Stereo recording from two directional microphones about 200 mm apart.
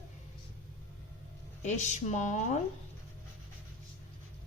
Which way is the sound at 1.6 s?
35° left (ahead or behind).